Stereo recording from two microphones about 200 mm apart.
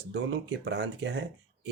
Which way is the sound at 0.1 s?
55° right (ahead or behind).